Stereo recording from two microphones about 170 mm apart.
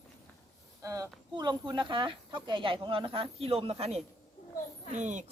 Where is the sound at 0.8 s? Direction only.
20° right (ahead or behind).